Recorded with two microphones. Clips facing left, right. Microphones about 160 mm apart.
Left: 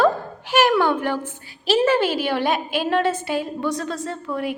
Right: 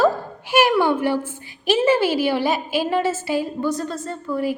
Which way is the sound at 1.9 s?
55° left (ahead or behind).